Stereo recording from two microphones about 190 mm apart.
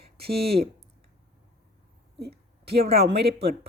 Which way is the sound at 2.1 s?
60° right (ahead or behind).